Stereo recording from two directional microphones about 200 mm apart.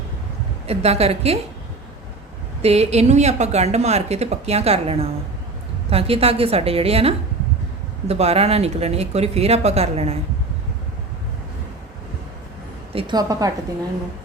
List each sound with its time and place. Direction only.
0.7 s a woman's voice: 30° right (ahead or behind)
2.6 s a woman's voice: 30° right (ahead or behind)
12.9 s a woman's voice: 25° right (ahead or behind)